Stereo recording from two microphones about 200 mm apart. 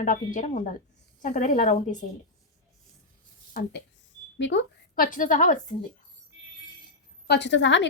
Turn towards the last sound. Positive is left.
turn(degrees=65)  # may be behind; listen again after turning